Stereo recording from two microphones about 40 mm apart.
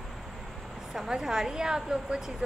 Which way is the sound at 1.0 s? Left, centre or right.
Centre.